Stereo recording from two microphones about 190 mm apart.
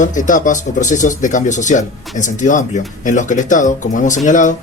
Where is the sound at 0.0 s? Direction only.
40° left (ahead or behind).